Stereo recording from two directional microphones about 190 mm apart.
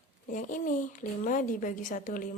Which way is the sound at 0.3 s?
45° left (ahead or behind).